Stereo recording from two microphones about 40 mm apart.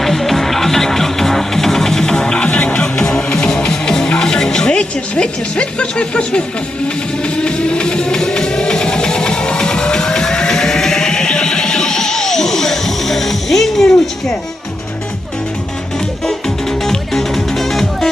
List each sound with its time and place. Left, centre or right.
0.0 s music: centre
16.8 s music: centre